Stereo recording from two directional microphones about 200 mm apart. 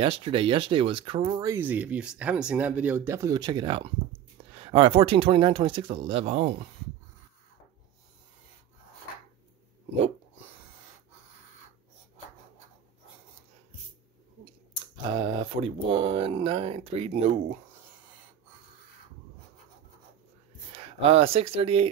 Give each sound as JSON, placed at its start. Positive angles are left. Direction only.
{"t": 0.0, "sound": "speech", "side_deg": -25}
{"t": 15.0, "sound": "speech", "side_deg": -25}
{"t": 20.7, "sound": "speech", "side_deg": -30}